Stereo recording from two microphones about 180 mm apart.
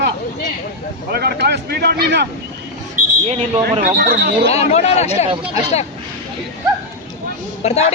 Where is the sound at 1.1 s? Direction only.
60° right (ahead or behind).